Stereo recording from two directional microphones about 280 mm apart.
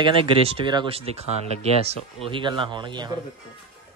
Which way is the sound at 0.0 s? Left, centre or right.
Centre.